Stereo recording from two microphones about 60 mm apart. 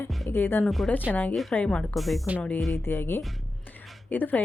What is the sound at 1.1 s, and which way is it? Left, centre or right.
Speech, left.